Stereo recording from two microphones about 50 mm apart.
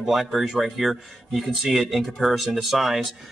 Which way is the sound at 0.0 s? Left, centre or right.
Centre.